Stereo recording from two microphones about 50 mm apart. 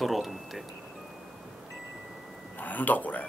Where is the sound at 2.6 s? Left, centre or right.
Left.